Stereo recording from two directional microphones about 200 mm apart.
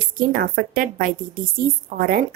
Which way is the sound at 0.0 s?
45° right (ahead or behind).